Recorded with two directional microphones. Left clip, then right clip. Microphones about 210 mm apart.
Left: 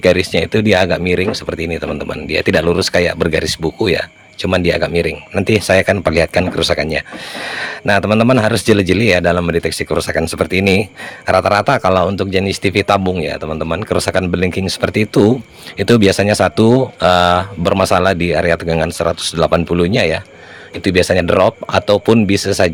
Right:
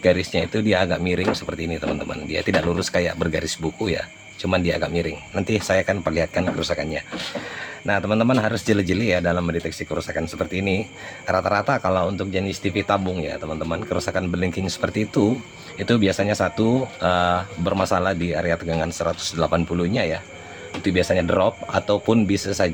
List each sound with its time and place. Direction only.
0.0 s speech: 40° left (ahead or behind)